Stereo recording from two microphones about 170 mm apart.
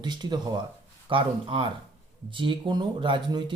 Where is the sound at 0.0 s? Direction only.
25° right (ahead or behind).